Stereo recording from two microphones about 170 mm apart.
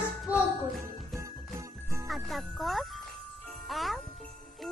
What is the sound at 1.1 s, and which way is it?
Jingle bell, 20° right (ahead or behind).